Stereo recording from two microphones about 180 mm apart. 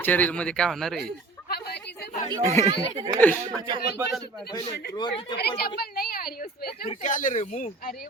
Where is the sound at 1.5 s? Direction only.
65° left (ahead or behind).